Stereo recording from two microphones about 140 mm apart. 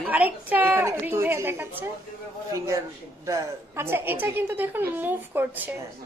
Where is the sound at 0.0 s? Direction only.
10° right (ahead or behind).